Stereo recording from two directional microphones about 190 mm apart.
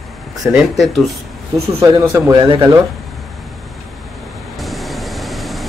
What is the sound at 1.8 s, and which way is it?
Speech, 20° right (ahead or behind).